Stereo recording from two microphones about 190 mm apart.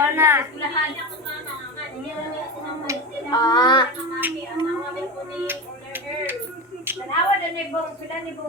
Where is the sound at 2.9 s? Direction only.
15° right (ahead or behind).